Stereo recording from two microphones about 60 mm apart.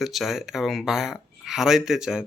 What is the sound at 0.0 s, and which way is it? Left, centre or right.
Speech, centre.